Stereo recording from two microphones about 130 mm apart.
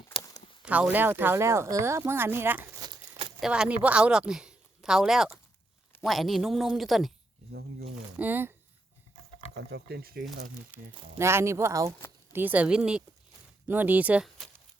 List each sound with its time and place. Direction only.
0.2 s a sound: 30° left (ahead or behind)
0.6 s speech: 10° right (ahead or behind)
2.8 s a sound: 35° right (ahead or behind)
3.4 s a woman's voice: 5° right (ahead or behind)
8.2 s speech: 15° right (ahead or behind)
11.2 s speech: 20° right (ahead or behind)